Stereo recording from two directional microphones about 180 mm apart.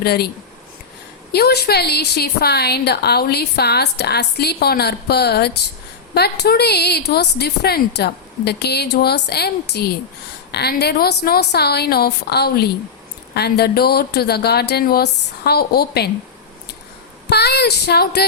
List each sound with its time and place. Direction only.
0.0 s a woman's voice: 60° left (ahead or behind)
1.3 s a woman's voice: 65° left (ahead or behind)
17.2 s a woman's voice: 65° left (ahead or behind)